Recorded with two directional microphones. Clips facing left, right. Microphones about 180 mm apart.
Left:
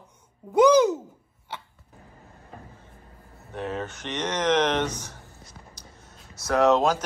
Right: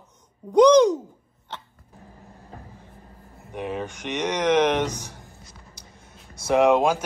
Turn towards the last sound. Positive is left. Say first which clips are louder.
# right 2 dB
turn(degrees=-10)  # may be behind; listen again after turning